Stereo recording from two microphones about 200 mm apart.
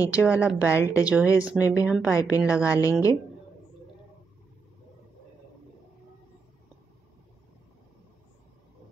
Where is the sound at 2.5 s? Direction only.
15° left (ahead or behind).